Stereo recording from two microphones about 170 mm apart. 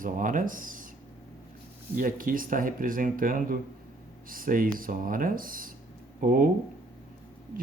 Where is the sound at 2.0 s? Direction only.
55° right (ahead or behind).